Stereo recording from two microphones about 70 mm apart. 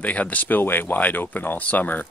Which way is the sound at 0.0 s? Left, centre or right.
Left.